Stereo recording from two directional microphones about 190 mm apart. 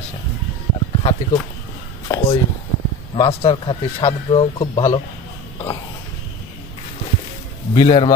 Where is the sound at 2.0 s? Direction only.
20° left (ahead or behind).